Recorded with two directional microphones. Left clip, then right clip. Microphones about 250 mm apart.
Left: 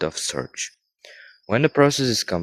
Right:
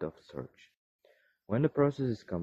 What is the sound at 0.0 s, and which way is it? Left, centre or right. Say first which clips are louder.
Speech: left 14 dB; left.